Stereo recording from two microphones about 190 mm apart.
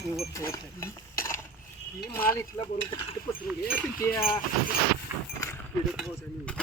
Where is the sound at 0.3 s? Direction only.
15° left (ahead or behind).